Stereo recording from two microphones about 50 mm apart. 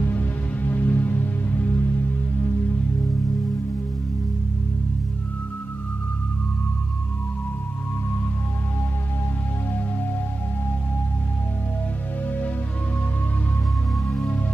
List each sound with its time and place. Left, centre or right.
0.0 s music: left